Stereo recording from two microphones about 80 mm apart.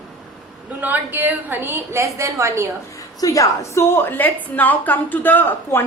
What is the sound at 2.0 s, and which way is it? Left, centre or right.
Speech, right.